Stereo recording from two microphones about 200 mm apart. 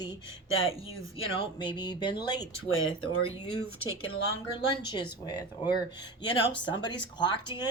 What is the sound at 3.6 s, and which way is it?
Speech, 90° left.